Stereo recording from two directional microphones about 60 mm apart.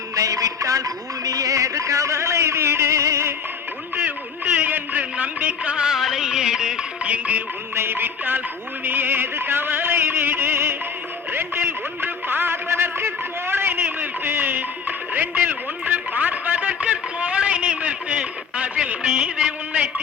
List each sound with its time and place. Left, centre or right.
0.2 s music: right
3.9 s music: right
7.8 s music: right
15.8 s a sound: right